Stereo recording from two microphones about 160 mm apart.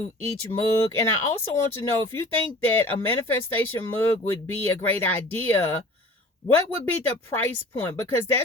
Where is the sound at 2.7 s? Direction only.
10° left (ahead or behind).